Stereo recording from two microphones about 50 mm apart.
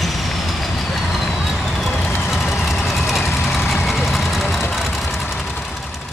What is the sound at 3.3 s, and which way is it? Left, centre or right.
Vehicle, left.